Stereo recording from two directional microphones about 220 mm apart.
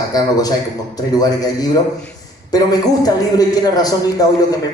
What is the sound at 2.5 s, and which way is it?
A man's voice, 15° left (ahead or behind).